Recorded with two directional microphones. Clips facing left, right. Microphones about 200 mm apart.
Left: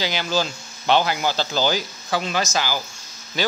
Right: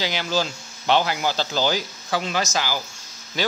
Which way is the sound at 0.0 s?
40° left (ahead or behind).